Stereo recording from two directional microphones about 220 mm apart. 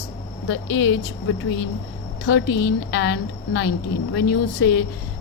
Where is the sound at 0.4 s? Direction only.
60° left (ahead or behind).